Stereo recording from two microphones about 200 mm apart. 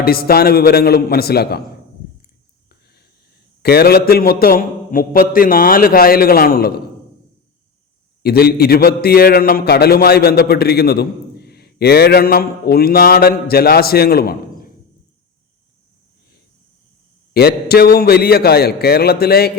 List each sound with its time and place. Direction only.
0.0 s a man's voice: 50° left (ahead or behind)
3.6 s a man's voice: 50° left (ahead or behind)
8.2 s a man's voice: 50° left (ahead or behind)
17.3 s a man's voice: 50° left (ahead or behind)